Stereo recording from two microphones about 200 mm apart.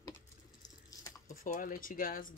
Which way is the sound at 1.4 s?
45° left (ahead or behind).